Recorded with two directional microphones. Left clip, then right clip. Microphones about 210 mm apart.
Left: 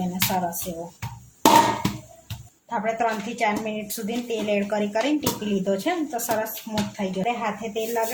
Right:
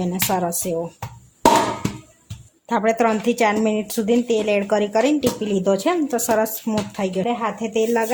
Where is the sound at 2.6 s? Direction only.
55° right (ahead or behind).